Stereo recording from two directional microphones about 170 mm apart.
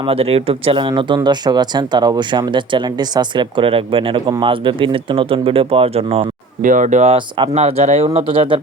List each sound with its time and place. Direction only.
0.1 s speech: 35° right (ahead or behind)
6.6 s speech: 50° right (ahead or behind); by 8.6 s 30° right (ahead or behind)